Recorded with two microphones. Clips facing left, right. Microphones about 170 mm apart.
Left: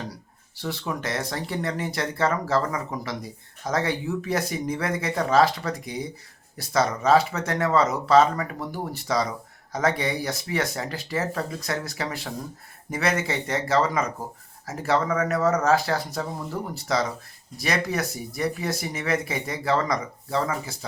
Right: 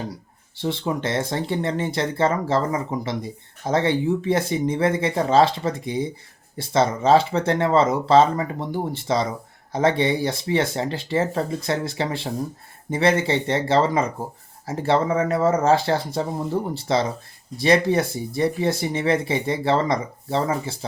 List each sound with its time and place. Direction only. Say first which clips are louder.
0.5 s speech: right 5 dB; 25° right (ahead or behind)